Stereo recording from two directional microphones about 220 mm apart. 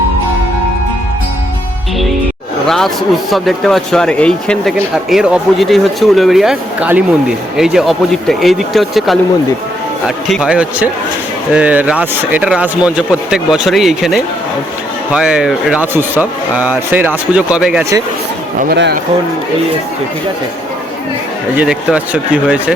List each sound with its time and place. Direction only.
2.6 s speech: centre (ahead or behind)
10.2 s speech: centre (ahead or behind)
18.7 s speech: 45° right (ahead or behind)
21.5 s speech: 5° right (ahead or behind)